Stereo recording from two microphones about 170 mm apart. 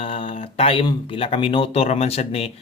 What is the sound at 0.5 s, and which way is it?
Speech, 35° left (ahead or behind).